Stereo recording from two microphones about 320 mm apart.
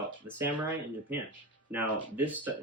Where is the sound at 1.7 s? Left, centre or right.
Centre.